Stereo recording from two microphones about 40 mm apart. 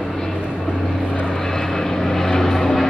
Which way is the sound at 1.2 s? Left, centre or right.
Centre.